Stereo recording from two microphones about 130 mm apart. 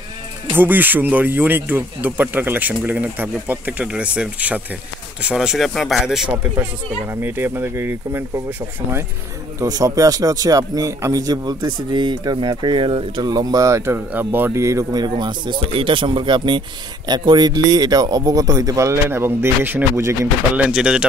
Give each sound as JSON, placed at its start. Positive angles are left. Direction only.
{"t": 0.5, "sound": "speech", "side_deg": -15}
{"t": 6.3, "sound": "speech", "side_deg": -20}